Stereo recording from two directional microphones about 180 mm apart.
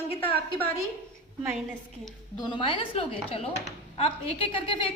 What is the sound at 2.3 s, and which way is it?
A woman's voice, 25° left (ahead or behind).